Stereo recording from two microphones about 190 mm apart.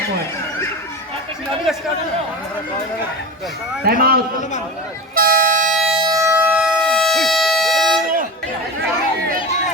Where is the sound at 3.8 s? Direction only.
50° right (ahead or behind).